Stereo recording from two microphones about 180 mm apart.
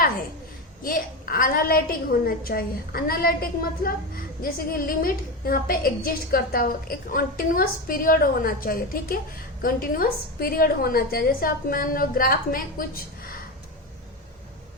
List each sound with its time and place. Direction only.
0.8 s a woman's voice: 50° left (ahead or behind)